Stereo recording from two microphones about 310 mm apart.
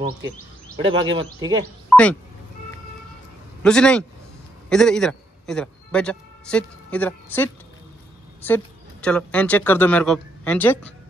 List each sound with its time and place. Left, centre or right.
0.7 s speech: centre
1.9 s a sound: centre
3.6 s a man's voice: centre